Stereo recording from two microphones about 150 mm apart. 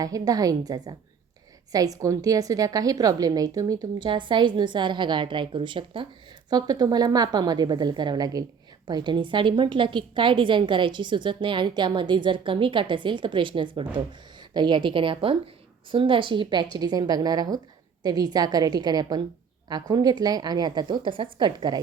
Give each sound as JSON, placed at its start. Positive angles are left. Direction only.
{"t": 0.0, "sound": "a woman's voice", "side_deg": -25}